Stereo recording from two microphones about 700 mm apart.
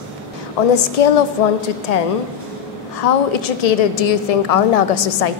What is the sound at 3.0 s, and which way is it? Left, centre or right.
A woman's voice, left.